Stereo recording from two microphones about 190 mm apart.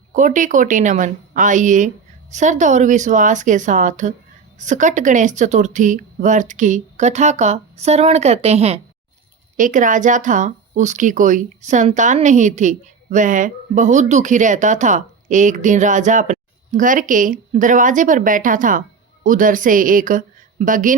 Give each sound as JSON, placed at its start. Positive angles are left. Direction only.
{"t": 0.1, "sound": "speech", "side_deg": -40}
{"t": 9.6, "sound": "a woman's voice", "side_deg": -45}